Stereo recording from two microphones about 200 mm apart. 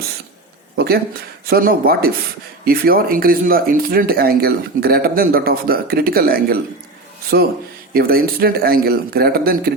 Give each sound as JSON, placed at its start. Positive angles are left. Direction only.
{"t": 0.8, "sound": "speech", "side_deg": -50}